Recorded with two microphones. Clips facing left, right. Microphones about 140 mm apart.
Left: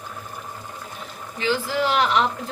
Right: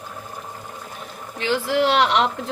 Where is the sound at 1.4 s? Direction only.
65° right (ahead or behind).